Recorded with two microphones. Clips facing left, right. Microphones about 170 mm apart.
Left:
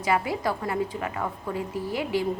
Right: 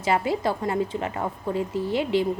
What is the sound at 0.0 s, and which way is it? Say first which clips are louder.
Speech: right 2 dB; 25° right (ahead or behind).